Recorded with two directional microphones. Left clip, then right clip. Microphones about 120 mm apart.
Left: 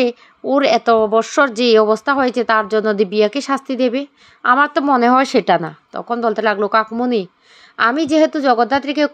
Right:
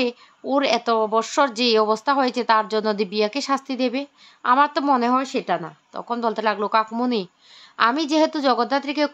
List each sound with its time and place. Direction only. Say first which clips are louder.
0.0 s speech: left 7 dB; 35° left (ahead or behind)
5.1 s a woman's voice: left 9 dB; 65° left (ahead or behind)
5.7 s a woman's voice: left 6 dB; 35° left (ahead or behind)